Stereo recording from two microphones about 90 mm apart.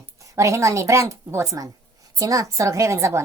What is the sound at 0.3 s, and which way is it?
A woman's voice, 35° right (ahead or behind).